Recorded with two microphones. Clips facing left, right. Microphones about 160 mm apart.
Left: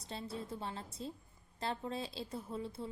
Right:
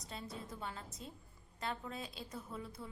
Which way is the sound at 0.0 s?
30° left (ahead or behind).